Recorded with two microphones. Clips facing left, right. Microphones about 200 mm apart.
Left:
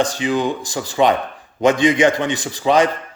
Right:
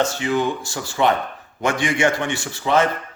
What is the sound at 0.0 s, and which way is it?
Speech, 15° left (ahead or behind).